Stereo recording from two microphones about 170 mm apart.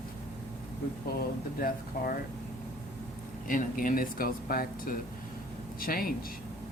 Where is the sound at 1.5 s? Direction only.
60° left (ahead or behind).